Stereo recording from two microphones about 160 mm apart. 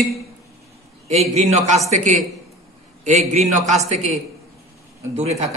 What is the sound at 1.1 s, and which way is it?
A man's voice, 40° right (ahead or behind).